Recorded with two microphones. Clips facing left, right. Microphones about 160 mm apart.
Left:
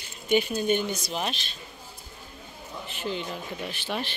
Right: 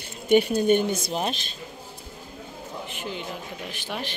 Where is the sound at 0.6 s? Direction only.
50° right (ahead or behind).